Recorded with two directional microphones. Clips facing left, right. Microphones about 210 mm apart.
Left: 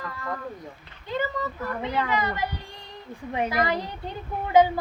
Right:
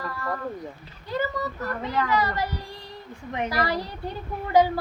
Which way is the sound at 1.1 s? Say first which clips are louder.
Right 1 dB; 20° left (ahead or behind).